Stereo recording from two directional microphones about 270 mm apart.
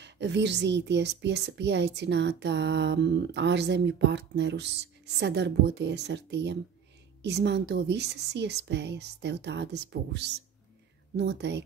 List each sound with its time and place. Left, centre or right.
0.0 s a woman's voice: right